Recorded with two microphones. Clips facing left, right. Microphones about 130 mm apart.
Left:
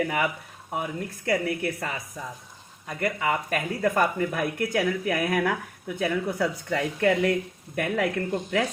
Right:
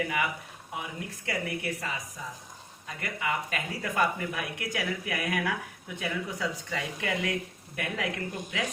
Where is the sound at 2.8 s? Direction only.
50° left (ahead or behind).